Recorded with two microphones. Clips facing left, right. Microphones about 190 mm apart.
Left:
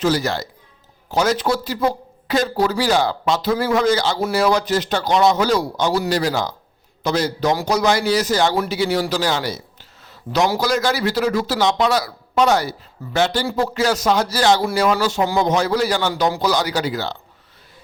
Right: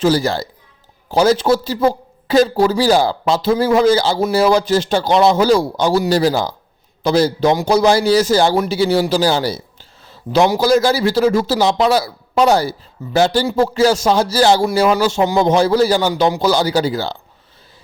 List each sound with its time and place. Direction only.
0.0 s speech: 30° right (ahead or behind)